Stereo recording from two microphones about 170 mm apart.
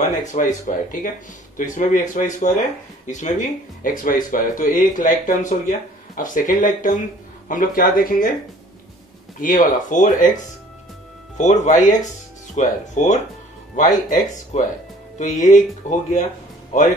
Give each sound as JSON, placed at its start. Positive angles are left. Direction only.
{"t": 0.2, "sound": "speech", "side_deg": 50}
{"t": 9.4, "sound": "speech", "side_deg": 50}